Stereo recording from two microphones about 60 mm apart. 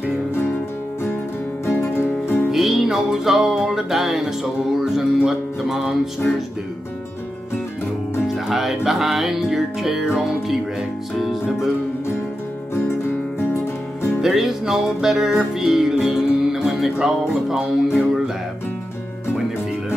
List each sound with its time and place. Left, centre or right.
1.7 s music: left
2.5 s music: centre
8.5 s music: centre
14.2 s music: centre